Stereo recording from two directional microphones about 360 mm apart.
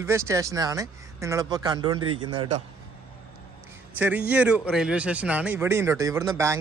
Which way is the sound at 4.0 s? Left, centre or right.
Centre.